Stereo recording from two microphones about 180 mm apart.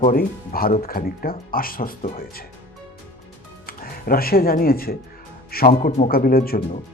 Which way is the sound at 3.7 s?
55° left (ahead or behind).